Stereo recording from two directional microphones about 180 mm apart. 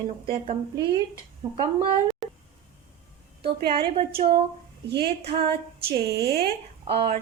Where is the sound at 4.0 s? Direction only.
30° right (ahead or behind).